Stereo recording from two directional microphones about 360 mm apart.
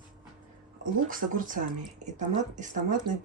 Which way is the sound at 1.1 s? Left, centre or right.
Right.